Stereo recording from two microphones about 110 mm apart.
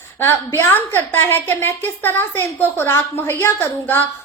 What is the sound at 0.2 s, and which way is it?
A woman's voice, 20° left (ahead or behind).